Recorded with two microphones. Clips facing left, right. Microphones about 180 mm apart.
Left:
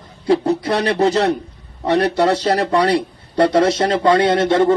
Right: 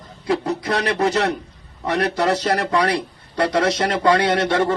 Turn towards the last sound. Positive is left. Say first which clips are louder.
# left 5 dB
turn(degrees=25)  # may be behind; listen again after turning